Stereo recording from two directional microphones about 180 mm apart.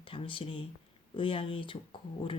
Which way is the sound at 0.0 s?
30° left (ahead or behind).